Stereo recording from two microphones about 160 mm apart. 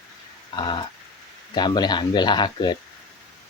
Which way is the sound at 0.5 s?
30° left (ahead or behind).